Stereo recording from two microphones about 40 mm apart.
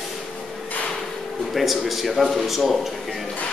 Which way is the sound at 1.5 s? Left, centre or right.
Centre.